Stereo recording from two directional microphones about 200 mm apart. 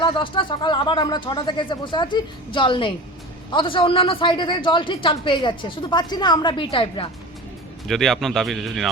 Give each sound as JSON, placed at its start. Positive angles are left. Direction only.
{"t": 0.0, "sound": "a woman's voice", "side_deg": 25}
{"t": 7.9, "sound": "speech", "side_deg": 0}